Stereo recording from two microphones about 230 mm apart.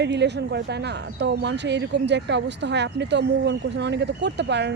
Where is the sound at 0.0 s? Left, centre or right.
Right.